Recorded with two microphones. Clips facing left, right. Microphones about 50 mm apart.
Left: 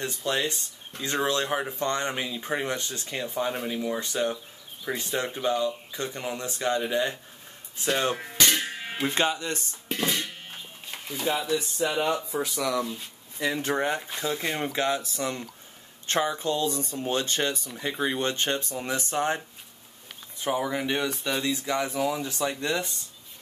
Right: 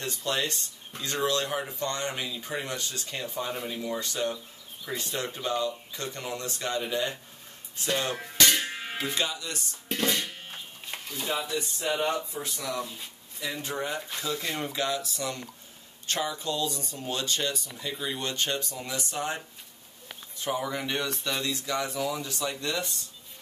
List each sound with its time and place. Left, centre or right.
0.0 s speech: centre
8.2 s music: centre
9.0 s speech: left
9.8 s music: centre
11.1 s speech: left
12.3 s speech: left
13.4 s speech: left
14.2 s speech: left
20.3 s speech: left